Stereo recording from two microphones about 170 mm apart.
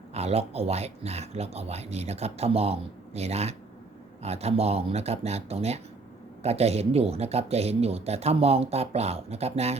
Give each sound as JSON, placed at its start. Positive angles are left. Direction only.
{"t": 0.1, "sound": "speech", "side_deg": -40}